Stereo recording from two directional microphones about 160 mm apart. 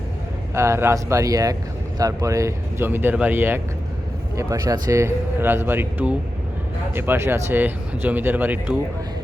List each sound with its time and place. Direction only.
0.5 s speech: 15° right (ahead or behind)